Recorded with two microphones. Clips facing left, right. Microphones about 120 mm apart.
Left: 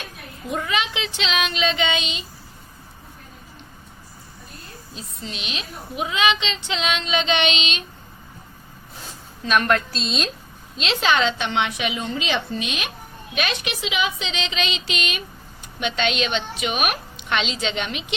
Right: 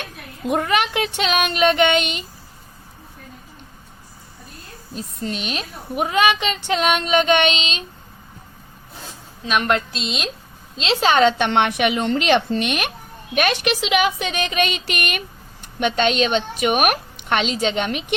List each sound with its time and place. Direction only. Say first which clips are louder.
0.0 s a woman's voice: right 6 dB; 65° right (ahead or behind)
4.9 s a woman's voice: right 8 dB; 45° right (ahead or behind)
9.4 s a woman's voice: even; 20° right (ahead or behind)
10.8 s a woman's voice: right 4 dB; 35° right (ahead or behind); by 15.2 s 60° right (ahead or behind)
15.8 s a woman's voice: right 5 dB; 45° right (ahead or behind)